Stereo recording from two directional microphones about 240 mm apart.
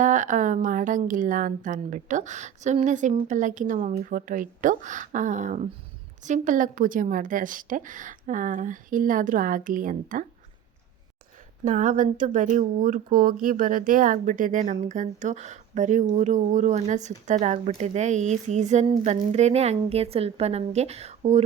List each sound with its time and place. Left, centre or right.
0.0 s a woman's voice: right
11.6 s a woman's voice: right